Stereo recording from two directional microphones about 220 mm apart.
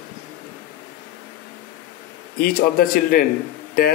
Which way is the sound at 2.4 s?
40° left (ahead or behind).